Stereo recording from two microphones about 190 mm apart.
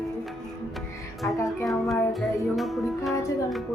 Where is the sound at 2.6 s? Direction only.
Centre (ahead or behind).